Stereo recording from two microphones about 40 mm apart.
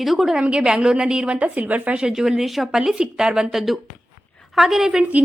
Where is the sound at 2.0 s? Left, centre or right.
Centre.